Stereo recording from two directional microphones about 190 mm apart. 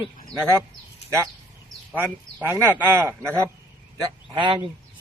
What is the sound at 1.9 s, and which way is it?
Speech, 10° right (ahead or behind).